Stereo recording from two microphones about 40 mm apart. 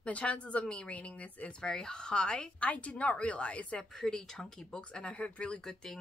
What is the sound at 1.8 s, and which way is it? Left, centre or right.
A woman's voice, centre.